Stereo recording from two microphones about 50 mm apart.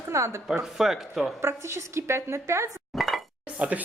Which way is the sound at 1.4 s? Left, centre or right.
Right.